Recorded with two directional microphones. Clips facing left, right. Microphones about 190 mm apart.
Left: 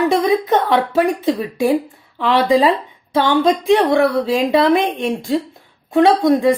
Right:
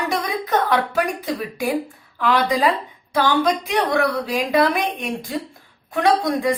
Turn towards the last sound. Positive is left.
turn(degrees=25)  # may be behind; listen again after turning